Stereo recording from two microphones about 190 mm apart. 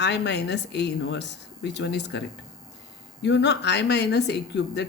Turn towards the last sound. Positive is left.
turn(degrees=65)  # may be behind; listen again after turning